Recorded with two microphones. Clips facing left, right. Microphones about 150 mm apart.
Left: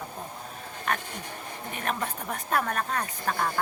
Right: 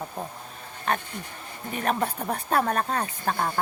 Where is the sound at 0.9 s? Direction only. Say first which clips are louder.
Right 3 dB; 30° right (ahead or behind).